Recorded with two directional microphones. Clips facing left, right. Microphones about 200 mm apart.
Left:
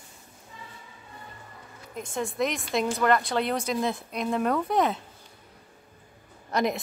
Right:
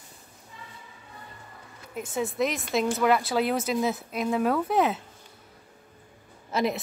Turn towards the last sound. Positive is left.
turn(degrees=-5)  # may be behind; listen again after turning